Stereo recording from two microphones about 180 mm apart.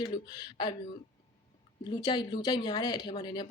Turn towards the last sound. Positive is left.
turn(degrees=25)  # may be behind; listen again after turning